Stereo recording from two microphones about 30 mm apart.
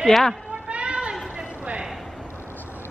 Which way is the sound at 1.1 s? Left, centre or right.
Centre.